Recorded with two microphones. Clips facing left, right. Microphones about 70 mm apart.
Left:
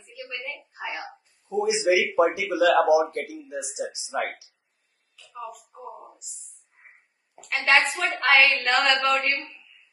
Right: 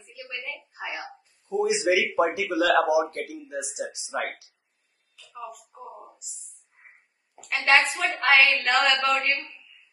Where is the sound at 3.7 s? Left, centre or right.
Right.